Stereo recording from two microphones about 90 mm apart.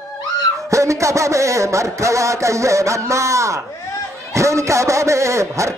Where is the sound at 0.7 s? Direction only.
35° right (ahead or behind).